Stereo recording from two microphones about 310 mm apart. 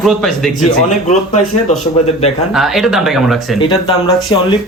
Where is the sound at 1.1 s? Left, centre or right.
Left.